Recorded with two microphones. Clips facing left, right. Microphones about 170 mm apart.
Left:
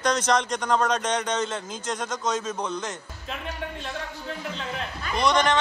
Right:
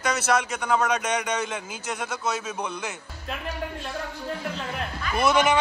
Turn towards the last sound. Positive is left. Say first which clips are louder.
# right 1 dB
turn(degrees=-5)  # may be behind; listen again after turning